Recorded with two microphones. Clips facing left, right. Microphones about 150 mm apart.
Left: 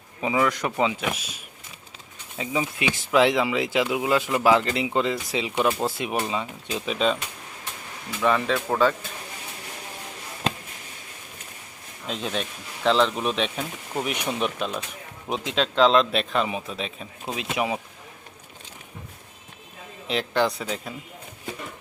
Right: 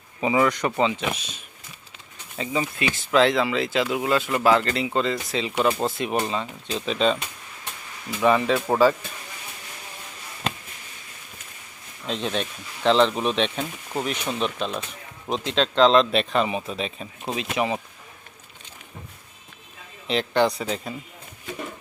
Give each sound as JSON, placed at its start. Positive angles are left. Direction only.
{"t": 0.2, "sound": "speech", "side_deg": -5}
{"t": 2.4, "sound": "speech", "side_deg": 10}
{"t": 8.2, "sound": "speech", "side_deg": -5}
{"t": 8.5, "sound": "speech", "side_deg": -20}
{"t": 12.0, "sound": "speech", "side_deg": 5}
{"t": 20.1, "sound": "speech", "side_deg": 0}